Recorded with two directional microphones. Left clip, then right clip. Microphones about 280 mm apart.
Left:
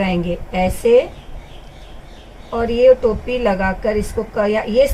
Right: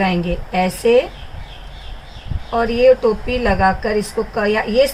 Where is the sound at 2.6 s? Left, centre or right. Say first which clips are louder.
Even; centre.